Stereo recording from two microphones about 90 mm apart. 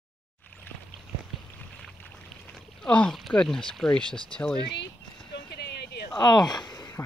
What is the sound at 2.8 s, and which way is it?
Speech, 10° left (ahead or behind).